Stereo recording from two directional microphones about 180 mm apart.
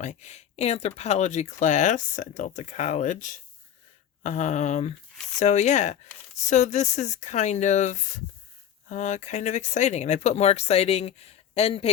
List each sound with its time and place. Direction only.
0.0 s speech: 40° left (ahead or behind)